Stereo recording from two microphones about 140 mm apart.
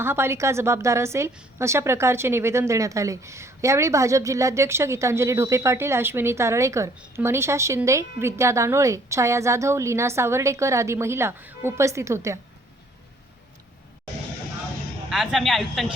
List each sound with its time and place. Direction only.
0.0 s a woman's voice: 15° right (ahead or behind)
15.1 s speech: centre (ahead or behind)